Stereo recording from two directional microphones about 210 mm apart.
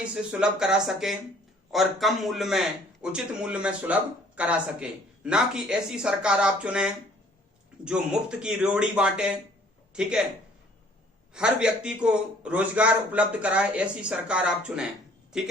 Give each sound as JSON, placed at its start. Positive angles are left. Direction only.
{"t": 0.0, "sound": "speech", "side_deg": -5}
{"t": 11.3, "sound": "speech", "side_deg": -5}